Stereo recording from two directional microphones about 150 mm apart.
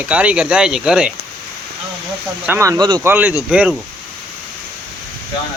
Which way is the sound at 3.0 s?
15° right (ahead or behind).